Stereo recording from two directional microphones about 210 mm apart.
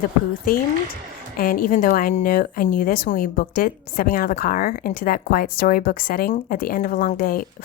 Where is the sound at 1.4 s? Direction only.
40° left (ahead or behind).